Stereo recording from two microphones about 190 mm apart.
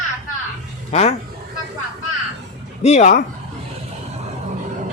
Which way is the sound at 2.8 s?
35° left (ahead or behind).